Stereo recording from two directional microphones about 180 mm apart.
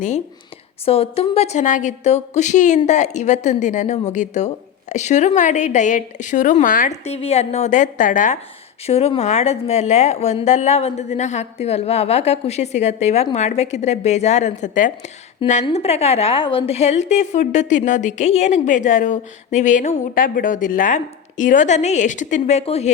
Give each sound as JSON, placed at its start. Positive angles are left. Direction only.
{"t": 0.9, "sound": "a woman's voice", "side_deg": 35}